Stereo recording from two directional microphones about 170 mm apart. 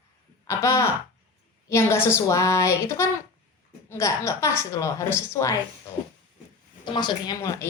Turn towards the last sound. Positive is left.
turn(degrees=20)  # may be behind; listen again after turning